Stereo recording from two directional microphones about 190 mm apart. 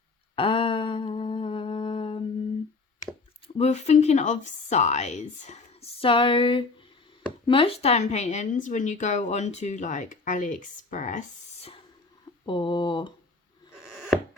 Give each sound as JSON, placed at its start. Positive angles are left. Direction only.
{"t": 0.3, "sound": "humming", "side_deg": 30}
{"t": 3.4, "sound": "a woman's voice", "side_deg": 35}
{"t": 12.5, "sound": "speech", "side_deg": 25}
{"t": 13.8, "sound": "chopping", "side_deg": 0}